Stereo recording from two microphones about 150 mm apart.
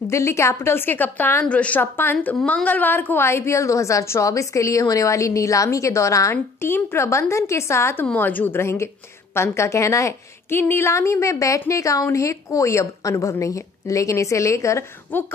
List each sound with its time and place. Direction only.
0.1 s a woman's voice: 20° left (ahead or behind)